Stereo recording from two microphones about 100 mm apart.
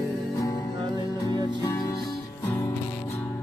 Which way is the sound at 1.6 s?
40° left (ahead or behind).